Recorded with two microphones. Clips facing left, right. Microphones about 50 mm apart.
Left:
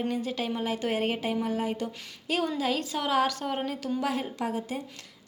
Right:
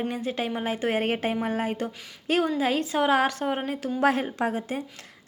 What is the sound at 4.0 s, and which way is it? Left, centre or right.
Speech, right.